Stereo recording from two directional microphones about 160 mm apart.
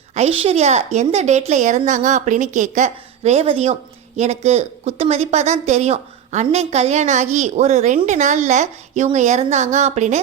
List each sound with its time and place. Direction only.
0.1 s a woman's voice: 40° right (ahead or behind)